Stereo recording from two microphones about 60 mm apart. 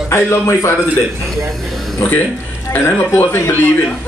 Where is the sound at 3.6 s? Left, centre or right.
Left.